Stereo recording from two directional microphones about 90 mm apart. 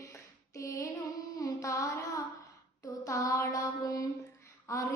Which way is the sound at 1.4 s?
45° left (ahead or behind).